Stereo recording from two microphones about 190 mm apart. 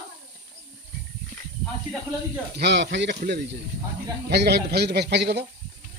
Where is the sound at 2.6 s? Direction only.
65° right (ahead or behind).